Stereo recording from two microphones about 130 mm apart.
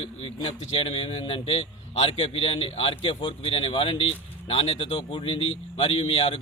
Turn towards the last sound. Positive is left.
turn(degrees=45)  # may be behind; listen again after turning